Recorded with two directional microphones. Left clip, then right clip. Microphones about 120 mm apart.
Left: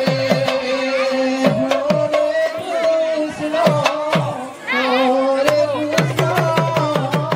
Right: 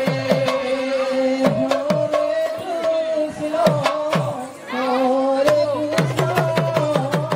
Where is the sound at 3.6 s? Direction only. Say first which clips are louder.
Left 2 dB; 5° right (ahead or behind).